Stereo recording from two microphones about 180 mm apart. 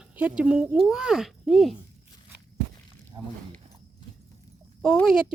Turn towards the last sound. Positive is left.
turn(degrees=-5)  # may be behind; listen again after turning